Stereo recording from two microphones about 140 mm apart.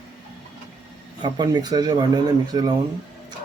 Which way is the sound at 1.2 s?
30° right (ahead or behind).